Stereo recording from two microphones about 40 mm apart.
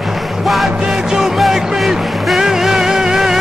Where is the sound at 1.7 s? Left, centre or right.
Centre.